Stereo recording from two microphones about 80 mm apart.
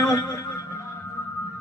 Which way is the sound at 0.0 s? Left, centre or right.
Left.